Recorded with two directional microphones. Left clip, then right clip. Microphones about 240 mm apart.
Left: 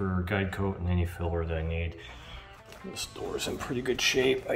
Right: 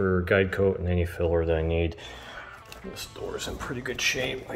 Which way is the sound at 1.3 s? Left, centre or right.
Centre.